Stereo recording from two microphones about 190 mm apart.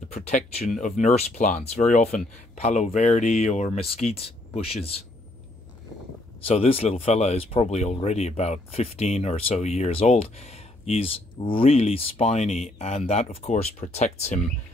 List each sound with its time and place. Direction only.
0.1 s speech: 35° left (ahead or behind)
6.4 s speech: 30° left (ahead or behind)